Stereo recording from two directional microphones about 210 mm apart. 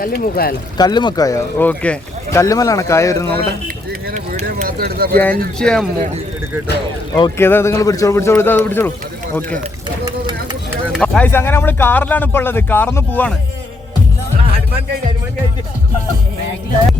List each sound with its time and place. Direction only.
0.0 s speech: 45° left (ahead or behind)
0.8 s speech: 20° left (ahead or behind)
4.1 s a sound: 40° right (ahead or behind)
5.1 s speech: 10° left (ahead or behind)
7.2 s speech: 10° left (ahead or behind)
10.9 s speech: 5° left (ahead or behind)